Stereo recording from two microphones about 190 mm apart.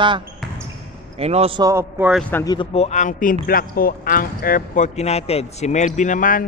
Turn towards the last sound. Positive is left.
turn(degrees=45)  # may be behind; listen again after turning